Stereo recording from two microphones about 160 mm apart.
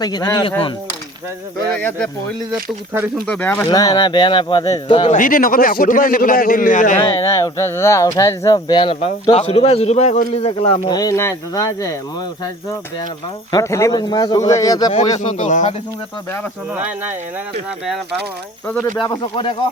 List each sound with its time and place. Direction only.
0.0 s speech: 25° left (ahead or behind)
1.7 s speech: 10° left (ahead or behind)
3.2 s speech: 10° left (ahead or behind)
3.7 s speech: 25° left (ahead or behind)
5.1 s a man's voice: 60° left (ahead or behind)
7.1 s speech: 20° left (ahead or behind)
13.5 s speech: 20° left (ahead or behind)
15.2 s speech: 50° left (ahead or behind)
18.9 s speech: 30° left (ahead or behind)